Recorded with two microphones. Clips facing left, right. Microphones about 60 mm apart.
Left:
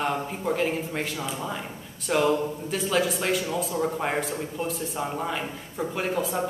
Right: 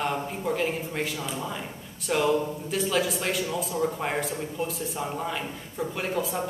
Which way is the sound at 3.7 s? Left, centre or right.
Centre.